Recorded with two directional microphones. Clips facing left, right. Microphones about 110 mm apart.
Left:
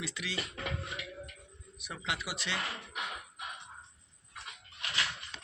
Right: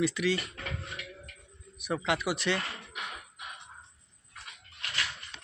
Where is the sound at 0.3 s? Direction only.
20° left (ahead or behind).